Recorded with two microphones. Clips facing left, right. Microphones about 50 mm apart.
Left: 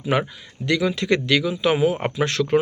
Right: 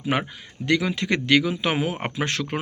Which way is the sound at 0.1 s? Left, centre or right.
Right.